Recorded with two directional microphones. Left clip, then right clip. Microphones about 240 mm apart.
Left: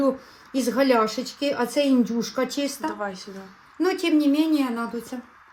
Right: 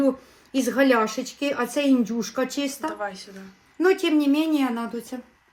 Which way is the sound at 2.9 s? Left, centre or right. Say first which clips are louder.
Even; left.